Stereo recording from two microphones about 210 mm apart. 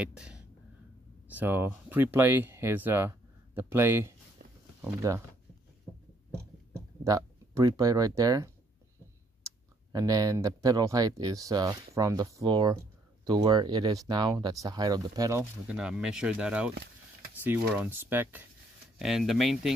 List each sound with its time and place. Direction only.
0.0 s speech: 5° right (ahead or behind)
4.4 s a sound: 45° right (ahead or behind)
4.8 s speech: 15° right (ahead or behind)
7.1 s speech: 15° right (ahead or behind)
9.9 s speech: 20° right (ahead or behind)
15.7 s speech: 5° right (ahead or behind)